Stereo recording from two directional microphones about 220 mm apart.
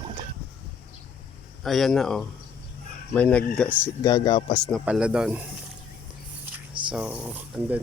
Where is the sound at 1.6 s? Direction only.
Centre (ahead or behind).